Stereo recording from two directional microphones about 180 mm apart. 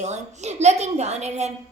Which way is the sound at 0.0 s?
40° right (ahead or behind).